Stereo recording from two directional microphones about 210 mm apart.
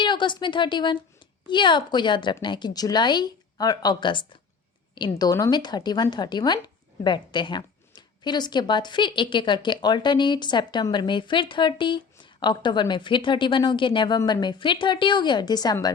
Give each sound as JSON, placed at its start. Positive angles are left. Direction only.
{"t": 0.0, "sound": "a woman's voice", "side_deg": 20}